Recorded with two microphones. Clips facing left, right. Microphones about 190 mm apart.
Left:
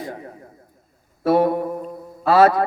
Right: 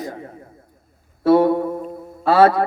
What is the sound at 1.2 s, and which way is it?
A man's voice, 25° right (ahead or behind).